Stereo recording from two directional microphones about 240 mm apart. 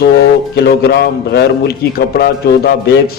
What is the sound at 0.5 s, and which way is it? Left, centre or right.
A man's voice, left.